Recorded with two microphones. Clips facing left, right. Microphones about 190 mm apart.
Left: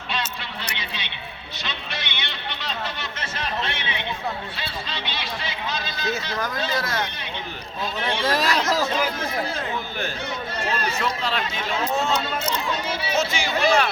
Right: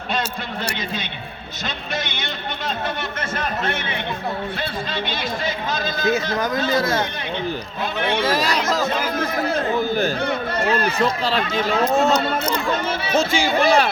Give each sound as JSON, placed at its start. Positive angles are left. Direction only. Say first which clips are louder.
{"t": 0.8, "sound": "a man's voice", "louder": "right 7 dB", "side_deg": -45}
{"t": 6.7, "sound": "speech", "louder": "right 8 dB", "side_deg": -25}
{"t": 7.9, "sound": "speech", "louder": "right 4 dB", "side_deg": -60}
{"t": 8.3, "sound": "speech", "louder": "right 2 dB", "side_deg": 0}
{"t": 8.8, "sound": "a man's voice", "louder": "right 2 dB", "side_deg": -55}
{"t": 10.2, "sound": "speech", "louder": "right 7 dB", "side_deg": -60}
{"t": 11.0, "sound": "speech", "louder": "right 5 dB", "side_deg": -35}
{"t": 12.2, "sound": "a man's voice", "louder": "right 5 dB", "side_deg": -55}
{"t": 13.1, "sound": "speech", "louder": "right 6 dB", "side_deg": -30}